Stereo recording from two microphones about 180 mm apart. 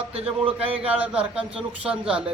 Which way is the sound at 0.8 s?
5° right (ahead or behind).